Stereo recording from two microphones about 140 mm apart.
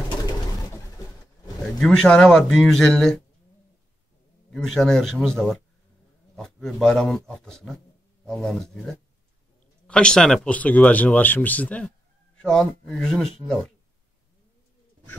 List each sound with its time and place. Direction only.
1.8 s speech: 5° left (ahead or behind)
4.5 s speech: 5° left (ahead or behind)